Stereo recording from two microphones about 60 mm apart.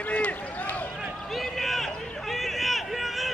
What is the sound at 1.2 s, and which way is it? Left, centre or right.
Run, centre.